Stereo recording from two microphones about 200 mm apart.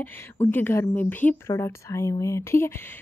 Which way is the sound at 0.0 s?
10° left (ahead or behind).